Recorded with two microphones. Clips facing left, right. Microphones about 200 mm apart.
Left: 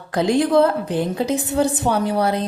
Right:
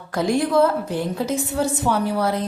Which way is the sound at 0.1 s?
20° left (ahead or behind).